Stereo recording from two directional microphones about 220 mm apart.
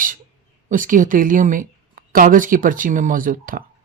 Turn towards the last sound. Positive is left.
turn(degrees=-40)  # may be behind; listen again after turning